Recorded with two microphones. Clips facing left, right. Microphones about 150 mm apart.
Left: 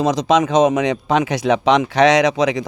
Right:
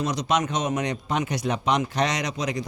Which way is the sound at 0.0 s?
90° left.